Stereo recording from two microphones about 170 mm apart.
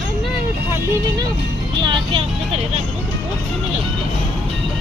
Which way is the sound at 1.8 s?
30° right (ahead or behind).